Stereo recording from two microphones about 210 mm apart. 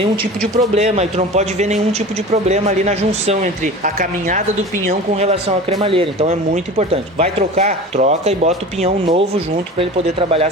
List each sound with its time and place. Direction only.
0.8 s speech: 30° right (ahead or behind)